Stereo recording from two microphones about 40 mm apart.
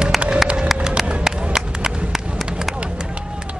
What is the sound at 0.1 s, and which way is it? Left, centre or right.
Music, centre.